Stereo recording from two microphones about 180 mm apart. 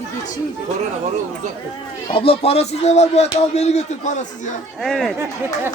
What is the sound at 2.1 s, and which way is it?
Speech, 30° left (ahead or behind).